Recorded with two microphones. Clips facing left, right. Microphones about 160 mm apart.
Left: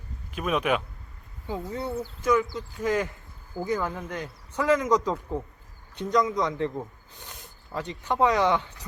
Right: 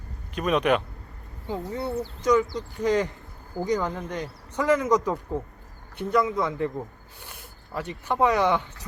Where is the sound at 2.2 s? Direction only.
20° right (ahead or behind).